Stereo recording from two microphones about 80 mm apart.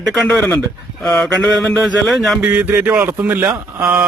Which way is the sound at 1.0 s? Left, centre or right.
Centre.